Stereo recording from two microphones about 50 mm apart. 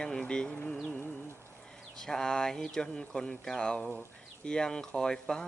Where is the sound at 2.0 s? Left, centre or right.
Centre.